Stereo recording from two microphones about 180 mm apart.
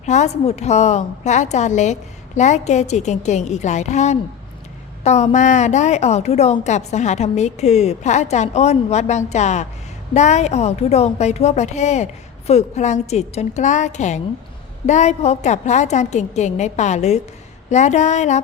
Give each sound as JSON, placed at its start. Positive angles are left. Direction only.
{"t": 0.0, "sound": "a woman's voice", "side_deg": 40}